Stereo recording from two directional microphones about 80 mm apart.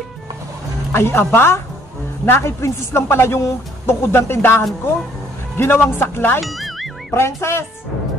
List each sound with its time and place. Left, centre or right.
0.9 s a woman's voice: left
6.4 s music: centre
7.2 s a woman's voice: left